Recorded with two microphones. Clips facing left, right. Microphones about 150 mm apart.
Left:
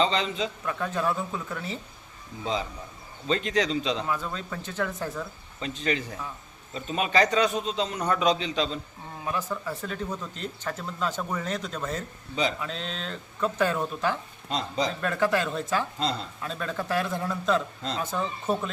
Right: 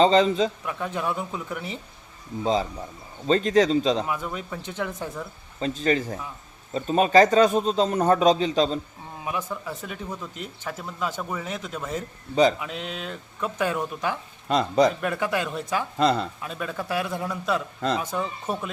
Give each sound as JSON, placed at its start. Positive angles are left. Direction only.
{"t": 0.0, "sound": "speech", "side_deg": -40}
{"t": 0.6, "sound": "speech", "side_deg": -15}
{"t": 2.4, "sound": "speech", "side_deg": -40}
{"t": 4.0, "sound": "speech", "side_deg": -15}
{"t": 5.5, "sound": "a man's voice", "side_deg": -40}
{"t": 9.2, "sound": "speech", "side_deg": -10}
{"t": 12.3, "sound": "a man's voice", "side_deg": -40}
{"t": 12.5, "sound": "speech", "side_deg": -15}
{"t": 14.4, "sound": "speech", "side_deg": -60}
{"t": 15.0, "sound": "speech", "side_deg": -15}
{"t": 16.0, "sound": "speech", "side_deg": -65}
{"t": 16.4, "sound": "speech", "side_deg": -10}